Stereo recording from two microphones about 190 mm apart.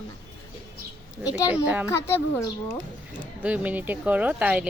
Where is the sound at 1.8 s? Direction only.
15° left (ahead or behind).